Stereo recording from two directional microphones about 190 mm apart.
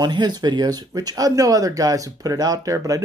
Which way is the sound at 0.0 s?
20° right (ahead or behind).